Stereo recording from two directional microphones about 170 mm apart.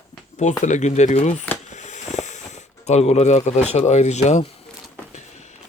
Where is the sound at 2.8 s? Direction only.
40° left (ahead or behind).